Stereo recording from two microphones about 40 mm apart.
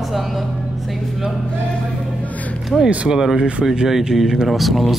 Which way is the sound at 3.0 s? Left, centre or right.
Centre.